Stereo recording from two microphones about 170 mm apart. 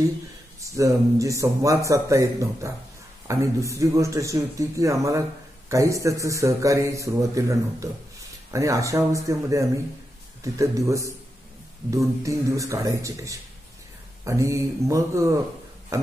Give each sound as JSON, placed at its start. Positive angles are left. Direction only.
{"t": 0.6, "sound": "a man's voice", "side_deg": -20}